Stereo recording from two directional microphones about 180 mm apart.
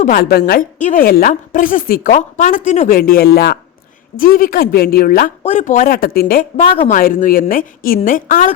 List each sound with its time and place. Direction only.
0.0 s a woman's voice: 50° left (ahead or behind)
6.6 s speech: 30° left (ahead or behind)
6.9 s a woman's voice: 50° left (ahead or behind)